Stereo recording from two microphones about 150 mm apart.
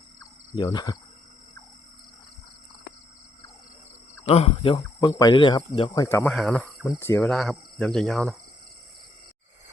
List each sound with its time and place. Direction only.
0.2 s cricket: 25° left (ahead or behind)
4.3 s speech: 40° left (ahead or behind); by 6.2 s 20° left (ahead or behind)
6.2 s speech: 5° left (ahead or behind)
6.8 s speech: 15° left (ahead or behind)
7.3 s speech: centre (ahead or behind)